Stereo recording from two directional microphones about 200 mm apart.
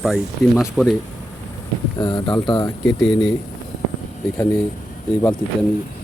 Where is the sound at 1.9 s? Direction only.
20° left (ahead or behind).